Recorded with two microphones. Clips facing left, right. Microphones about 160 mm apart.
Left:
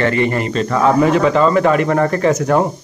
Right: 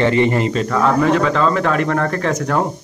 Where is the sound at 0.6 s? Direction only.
5° left (ahead or behind).